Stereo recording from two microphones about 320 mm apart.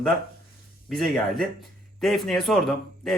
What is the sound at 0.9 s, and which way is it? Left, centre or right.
A man's voice, centre.